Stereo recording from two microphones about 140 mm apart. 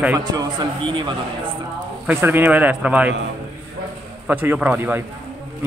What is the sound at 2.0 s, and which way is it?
A man's voice, 15° right (ahead or behind).